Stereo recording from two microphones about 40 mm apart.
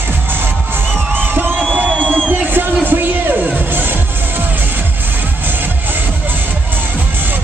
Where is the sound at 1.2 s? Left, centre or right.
Right.